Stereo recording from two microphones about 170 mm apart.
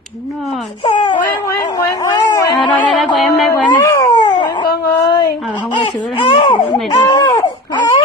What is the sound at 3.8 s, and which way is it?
Dog, 25° left (ahead or behind).